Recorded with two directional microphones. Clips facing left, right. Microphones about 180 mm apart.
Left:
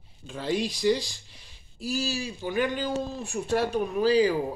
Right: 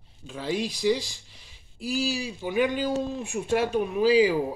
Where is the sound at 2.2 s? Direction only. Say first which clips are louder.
Right 2 dB; 10° right (ahead or behind).